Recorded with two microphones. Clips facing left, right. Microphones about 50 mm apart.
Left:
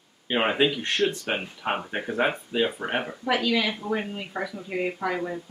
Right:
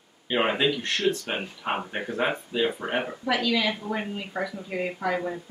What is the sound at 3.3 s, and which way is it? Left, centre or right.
Speech, centre.